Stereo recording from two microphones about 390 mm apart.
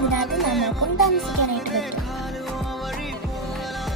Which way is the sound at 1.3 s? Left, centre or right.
Left.